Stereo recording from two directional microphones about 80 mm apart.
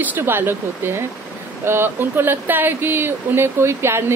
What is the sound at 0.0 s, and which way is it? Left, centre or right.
Speech, right.